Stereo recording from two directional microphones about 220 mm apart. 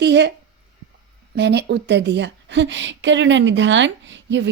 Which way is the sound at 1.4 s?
50° right (ahead or behind).